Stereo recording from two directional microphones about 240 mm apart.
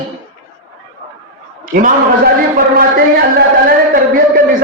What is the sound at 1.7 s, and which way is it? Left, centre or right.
Speech, right.